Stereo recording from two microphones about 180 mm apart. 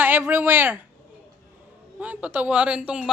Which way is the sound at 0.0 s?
10° right (ahead or behind).